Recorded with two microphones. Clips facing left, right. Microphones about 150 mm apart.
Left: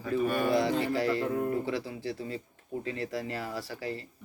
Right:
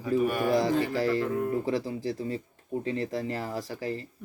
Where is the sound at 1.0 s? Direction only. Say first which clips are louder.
Right 2 dB; 35° right (ahead or behind).